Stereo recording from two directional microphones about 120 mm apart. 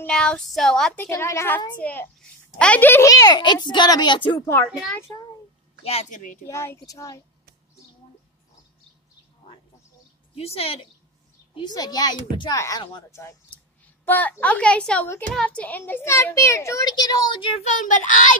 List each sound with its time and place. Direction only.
0.0 s speech: 5° left (ahead or behind)
0.9 s a child's voice: 20° left (ahead or behind)
3.1 s a child's voice: 30° left (ahead or behind)
5.9 s a child's voice: 75° left (ahead or behind); by 6.4 s 90° left
6.4 s a child's voice: 20° left (ahead or behind)
10.3 s speech: 55° left (ahead or behind)
11.7 s a child's voice: 35° left (ahead or behind)
17.7 s a child's voice: 90° left